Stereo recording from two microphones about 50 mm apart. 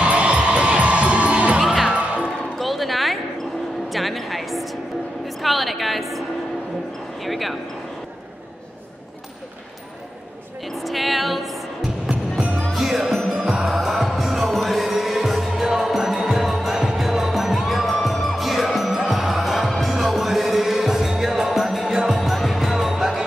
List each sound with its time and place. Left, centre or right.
0.0 s music: right
1.6 s music: centre
2.6 s a sound: centre
3.9 s music: centre
5.4 s a sound: centre
7.2 s speech: centre
10.6 s music: centre
12.1 s music: right
12.7 s music: centre